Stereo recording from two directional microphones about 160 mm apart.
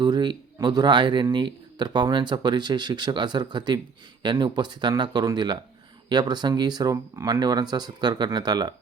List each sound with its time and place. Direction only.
0.0 s speech: 30° right (ahead or behind)